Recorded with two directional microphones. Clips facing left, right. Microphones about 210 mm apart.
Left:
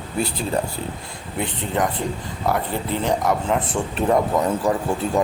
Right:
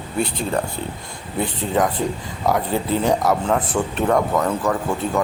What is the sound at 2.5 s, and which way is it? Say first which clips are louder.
Speech: right 3 dB; 10° right (ahead or behind).